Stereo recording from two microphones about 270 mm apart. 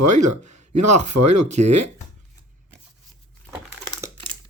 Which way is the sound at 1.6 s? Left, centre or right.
Right.